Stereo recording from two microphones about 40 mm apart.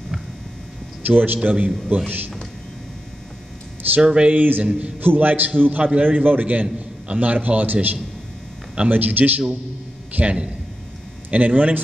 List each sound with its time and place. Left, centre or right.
1.0 s a man's voice: right
4.0 s speech: right
4.3 s a man's voice: right